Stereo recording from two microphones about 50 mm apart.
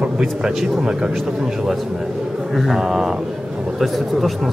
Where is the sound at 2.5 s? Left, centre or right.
Centre.